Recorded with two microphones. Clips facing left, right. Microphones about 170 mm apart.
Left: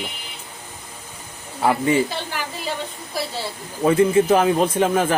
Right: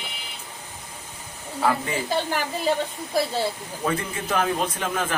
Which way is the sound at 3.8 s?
30° left (ahead or behind).